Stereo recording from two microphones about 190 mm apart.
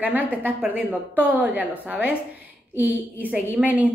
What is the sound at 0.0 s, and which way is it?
A woman's voice, 10° right (ahead or behind).